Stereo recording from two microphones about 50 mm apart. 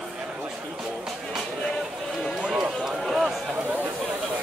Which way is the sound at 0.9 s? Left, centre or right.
Centre.